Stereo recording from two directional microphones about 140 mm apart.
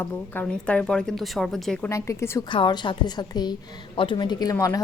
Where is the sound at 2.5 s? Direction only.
35° left (ahead or behind).